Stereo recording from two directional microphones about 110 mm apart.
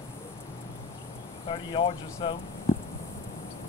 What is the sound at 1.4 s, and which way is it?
Speech, 50° left (ahead or behind).